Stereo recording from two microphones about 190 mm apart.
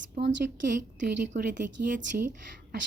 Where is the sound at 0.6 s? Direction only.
40° right (ahead or behind).